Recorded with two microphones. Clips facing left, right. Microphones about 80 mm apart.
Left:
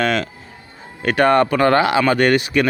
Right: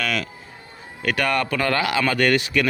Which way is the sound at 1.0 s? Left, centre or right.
Left.